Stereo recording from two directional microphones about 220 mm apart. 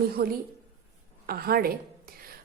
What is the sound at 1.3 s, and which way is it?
Speech, 45° right (ahead or behind).